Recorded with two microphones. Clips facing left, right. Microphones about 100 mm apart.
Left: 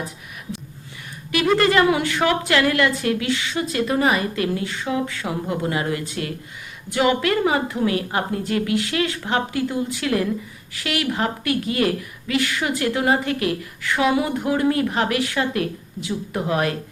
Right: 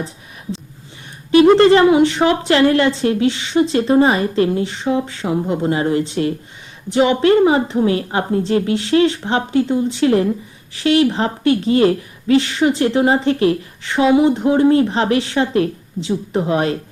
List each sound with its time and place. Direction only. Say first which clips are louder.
1.3 s speech: right 9 dB; 30° right (ahead or behind)